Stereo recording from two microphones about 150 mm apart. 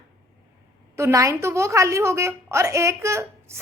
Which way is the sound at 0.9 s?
20° right (ahead or behind).